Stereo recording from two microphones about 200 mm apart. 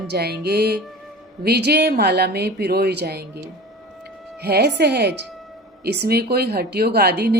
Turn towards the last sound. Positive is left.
turn(degrees=-50)  # may be behind; listen again after turning